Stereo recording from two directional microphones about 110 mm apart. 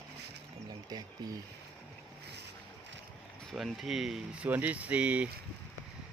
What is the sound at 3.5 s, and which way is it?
Speech, centre (ahead or behind).